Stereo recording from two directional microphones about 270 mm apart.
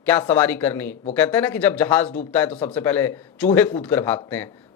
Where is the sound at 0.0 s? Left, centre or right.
Centre.